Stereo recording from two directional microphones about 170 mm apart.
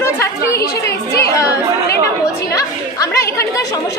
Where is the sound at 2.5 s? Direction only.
20° left (ahead or behind).